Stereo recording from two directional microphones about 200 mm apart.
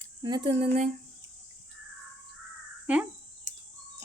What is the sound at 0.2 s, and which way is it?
Speech, 20° right (ahead or behind).